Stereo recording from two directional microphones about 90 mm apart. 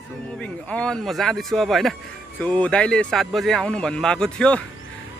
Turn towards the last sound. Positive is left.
turn(degrees=10)  # may be behind; listen again after turning